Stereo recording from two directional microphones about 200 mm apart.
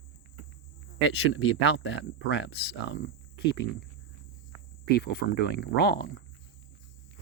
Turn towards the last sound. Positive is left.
turn(degrees=55)  # may be behind; listen again after turning